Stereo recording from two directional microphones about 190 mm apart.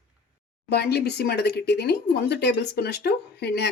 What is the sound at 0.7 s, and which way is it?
Speech, 60° left (ahead or behind).